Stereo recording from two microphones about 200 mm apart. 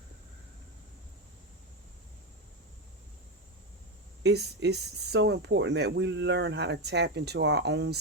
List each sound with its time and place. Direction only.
4.2 s speech: 55° right (ahead or behind)